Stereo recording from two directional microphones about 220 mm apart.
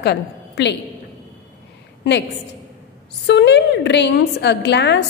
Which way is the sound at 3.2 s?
50° left (ahead or behind).